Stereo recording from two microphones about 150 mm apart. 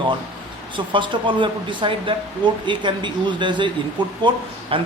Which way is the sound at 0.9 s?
35° right (ahead or behind).